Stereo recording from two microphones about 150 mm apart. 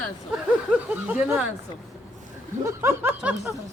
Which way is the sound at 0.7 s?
10° right (ahead or behind).